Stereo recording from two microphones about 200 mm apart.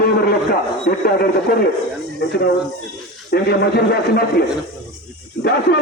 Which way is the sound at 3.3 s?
50° left (ahead or behind).